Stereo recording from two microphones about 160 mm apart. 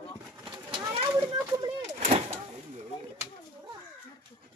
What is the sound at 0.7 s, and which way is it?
Children playing, 30° right (ahead or behind).